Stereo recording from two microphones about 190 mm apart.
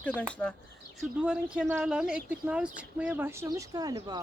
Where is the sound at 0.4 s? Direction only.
10° left (ahead or behind).